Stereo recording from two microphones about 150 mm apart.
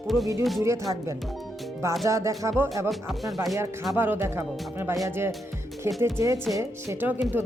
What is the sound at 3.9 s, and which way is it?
Speech, 15° right (ahead or behind).